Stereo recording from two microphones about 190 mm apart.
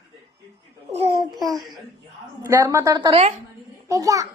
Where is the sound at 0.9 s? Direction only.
25° right (ahead or behind).